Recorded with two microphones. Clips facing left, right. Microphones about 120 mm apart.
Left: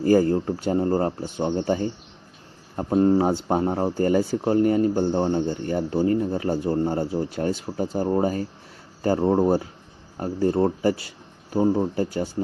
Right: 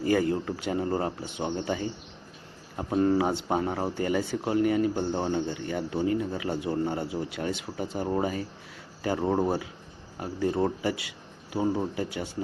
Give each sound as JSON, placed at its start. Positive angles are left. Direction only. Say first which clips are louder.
{"t": 0.0, "sound": "speech", "louder": "left 6 dB", "side_deg": 35}
{"t": 2.9, "sound": "speech", "louder": "left 5 dB", "side_deg": 30}
{"t": 9.2, "sound": "speech", "louder": "left 5 dB", "side_deg": 15}
{"t": 10.2, "sound": "speech", "louder": "left 5 dB", "side_deg": 40}